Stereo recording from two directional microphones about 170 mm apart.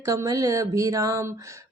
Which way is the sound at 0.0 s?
20° right (ahead or behind).